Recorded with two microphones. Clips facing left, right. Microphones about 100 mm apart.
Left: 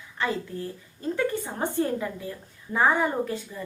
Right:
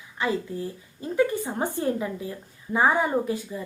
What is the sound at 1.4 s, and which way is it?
Speech, 15° right (ahead or behind).